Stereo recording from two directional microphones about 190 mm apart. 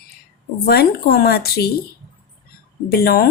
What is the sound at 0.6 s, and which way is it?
Speech, 55° left (ahead or behind).